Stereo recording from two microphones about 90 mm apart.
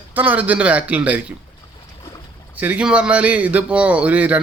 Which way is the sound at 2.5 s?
15° right (ahead or behind).